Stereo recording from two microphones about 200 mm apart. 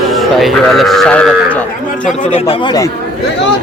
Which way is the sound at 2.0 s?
30° left (ahead or behind).